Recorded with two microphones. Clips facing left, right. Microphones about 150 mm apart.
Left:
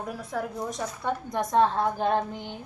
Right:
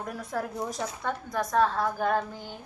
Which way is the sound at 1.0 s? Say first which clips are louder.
Left 3 dB; 20° left (ahead or behind).